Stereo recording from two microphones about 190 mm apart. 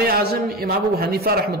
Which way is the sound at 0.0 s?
55° right (ahead or behind).